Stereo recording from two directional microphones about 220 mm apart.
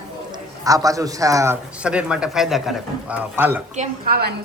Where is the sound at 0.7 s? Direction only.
15° right (ahead or behind).